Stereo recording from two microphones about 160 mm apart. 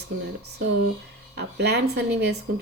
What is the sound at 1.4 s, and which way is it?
A woman's voice, 90° right.